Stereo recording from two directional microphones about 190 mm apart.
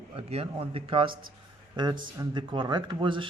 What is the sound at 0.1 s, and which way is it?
Speech, 30° right (ahead or behind).